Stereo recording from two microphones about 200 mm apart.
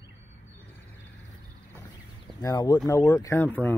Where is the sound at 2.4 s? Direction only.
15° left (ahead or behind).